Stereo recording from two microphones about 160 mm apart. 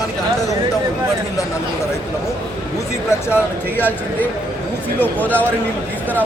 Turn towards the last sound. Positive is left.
turn(degrees=10)  # may be behind; listen again after turning